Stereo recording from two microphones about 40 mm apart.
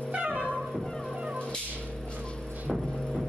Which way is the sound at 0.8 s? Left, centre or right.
Centre.